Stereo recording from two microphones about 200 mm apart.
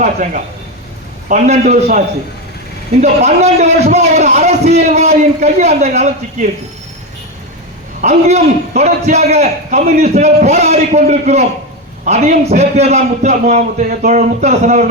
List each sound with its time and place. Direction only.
0.0 s a man's voice: 40° right (ahead or behind)
8.0 s a man's voice: 35° right (ahead or behind)